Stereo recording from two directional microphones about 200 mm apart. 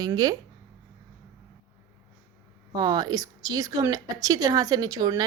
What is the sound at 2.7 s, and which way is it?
Speech, 20° right (ahead or behind).